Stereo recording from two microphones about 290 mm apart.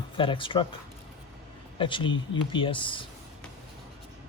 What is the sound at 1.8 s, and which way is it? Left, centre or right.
Speech, centre.